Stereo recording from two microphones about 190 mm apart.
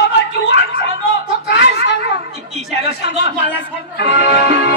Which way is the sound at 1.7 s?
65° left (ahead or behind).